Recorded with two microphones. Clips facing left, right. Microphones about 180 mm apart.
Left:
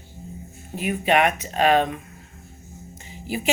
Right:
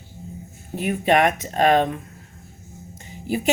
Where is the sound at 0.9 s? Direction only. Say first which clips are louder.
Right 2 dB; 45° right (ahead or behind).